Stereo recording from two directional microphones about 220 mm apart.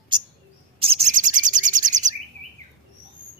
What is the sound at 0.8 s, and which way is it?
Bird, 30° right (ahead or behind).